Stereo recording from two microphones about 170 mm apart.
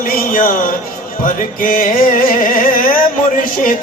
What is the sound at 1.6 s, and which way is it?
Music, 55° left (ahead or behind).